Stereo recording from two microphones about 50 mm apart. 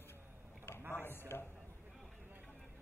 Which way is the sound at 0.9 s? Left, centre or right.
Left.